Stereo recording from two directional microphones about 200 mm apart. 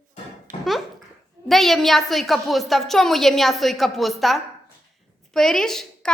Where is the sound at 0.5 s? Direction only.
40° right (ahead or behind).